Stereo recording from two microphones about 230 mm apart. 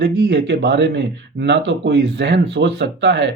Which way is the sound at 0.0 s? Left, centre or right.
Right.